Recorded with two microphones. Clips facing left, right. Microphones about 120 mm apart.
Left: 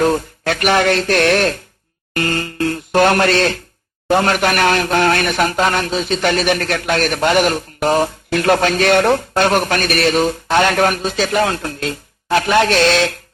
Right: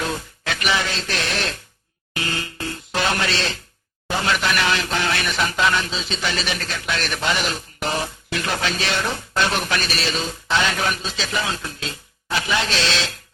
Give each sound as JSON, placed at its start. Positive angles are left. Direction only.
{"t": 0.0, "sound": "speech", "side_deg": 50}